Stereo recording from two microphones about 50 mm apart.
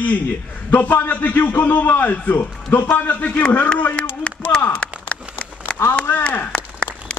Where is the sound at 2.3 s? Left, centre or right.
Left.